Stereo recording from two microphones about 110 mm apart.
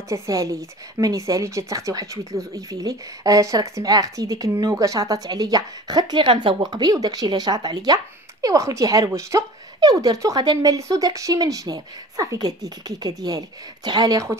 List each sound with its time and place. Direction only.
0.1 s a woman's voice: 30° right (ahead or behind)